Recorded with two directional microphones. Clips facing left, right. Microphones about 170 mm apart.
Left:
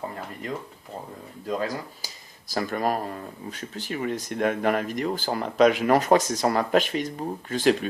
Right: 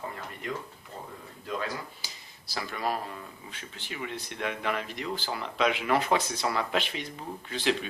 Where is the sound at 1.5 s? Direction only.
40° left (ahead or behind).